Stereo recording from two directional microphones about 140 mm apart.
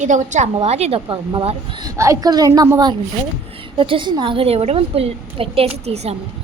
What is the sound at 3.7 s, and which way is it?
A woman's voice, 40° right (ahead or behind).